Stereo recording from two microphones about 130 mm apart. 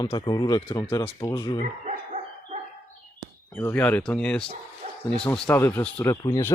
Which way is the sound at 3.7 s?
10° left (ahead or behind).